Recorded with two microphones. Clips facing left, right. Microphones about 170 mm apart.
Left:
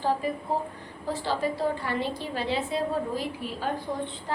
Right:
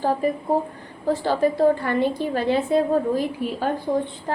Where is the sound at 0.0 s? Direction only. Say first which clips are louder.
Right 5 dB; 50° right (ahead or behind).